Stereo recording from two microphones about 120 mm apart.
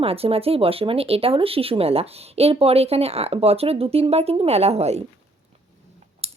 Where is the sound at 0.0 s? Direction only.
55° right (ahead or behind).